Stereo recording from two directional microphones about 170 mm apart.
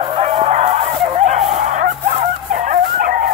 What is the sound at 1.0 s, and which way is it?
Dog, 40° right (ahead or behind).